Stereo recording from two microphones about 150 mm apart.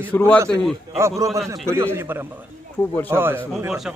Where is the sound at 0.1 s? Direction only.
10° left (ahead or behind).